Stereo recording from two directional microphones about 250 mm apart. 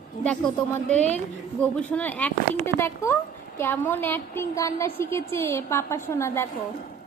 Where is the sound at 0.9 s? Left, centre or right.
Right.